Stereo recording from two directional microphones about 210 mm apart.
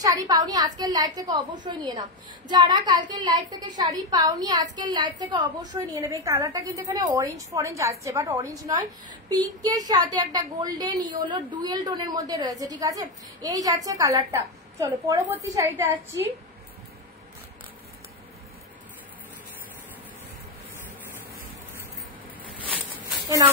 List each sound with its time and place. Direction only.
0.0 s a woman's voice: 15° right (ahead or behind)
23.2 s speech: 20° right (ahead or behind)